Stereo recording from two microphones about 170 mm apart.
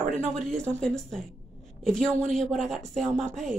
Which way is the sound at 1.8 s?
5° left (ahead or behind).